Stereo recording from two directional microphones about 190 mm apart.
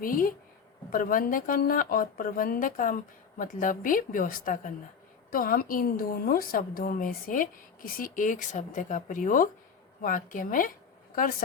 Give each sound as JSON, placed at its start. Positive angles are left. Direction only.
{"t": 0.0, "sound": "a woman's voice", "side_deg": 45}